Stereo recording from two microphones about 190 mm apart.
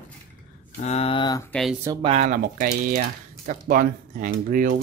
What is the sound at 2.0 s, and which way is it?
Speech, 35° right (ahead or behind).